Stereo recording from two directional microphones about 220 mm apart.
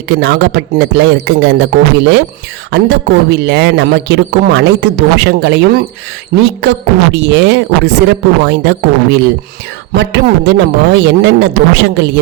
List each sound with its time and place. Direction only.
0.1 s a woman's voice: 50° right (ahead or behind)
2.6 s a woman's voice: 50° right (ahead or behind)